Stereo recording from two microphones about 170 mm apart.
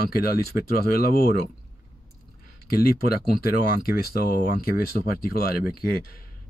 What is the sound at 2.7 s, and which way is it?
Speech, 60° left (ahead or behind).